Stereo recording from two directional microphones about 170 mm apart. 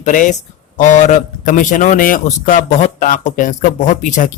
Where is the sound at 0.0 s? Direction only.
45° left (ahead or behind).